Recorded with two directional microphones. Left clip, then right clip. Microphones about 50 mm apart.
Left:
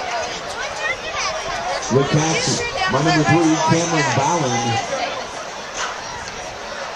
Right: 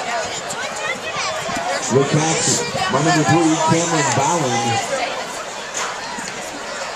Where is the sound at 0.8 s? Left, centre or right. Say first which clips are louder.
Left 1 dB; left.